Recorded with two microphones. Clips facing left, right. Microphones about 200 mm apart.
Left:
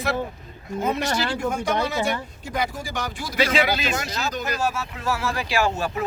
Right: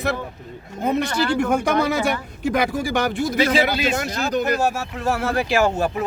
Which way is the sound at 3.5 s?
55° right (ahead or behind).